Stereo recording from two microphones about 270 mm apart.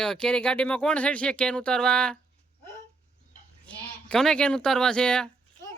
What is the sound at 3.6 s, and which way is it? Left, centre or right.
Speech, centre.